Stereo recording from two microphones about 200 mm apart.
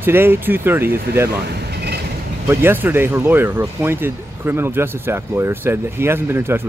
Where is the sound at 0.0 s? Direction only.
10° right (ahead or behind).